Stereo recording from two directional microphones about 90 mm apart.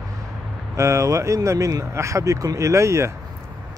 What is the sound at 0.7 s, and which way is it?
Speech, 35° right (ahead or behind).